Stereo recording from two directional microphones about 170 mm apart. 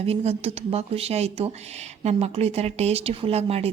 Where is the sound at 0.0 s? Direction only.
35° right (ahead or behind).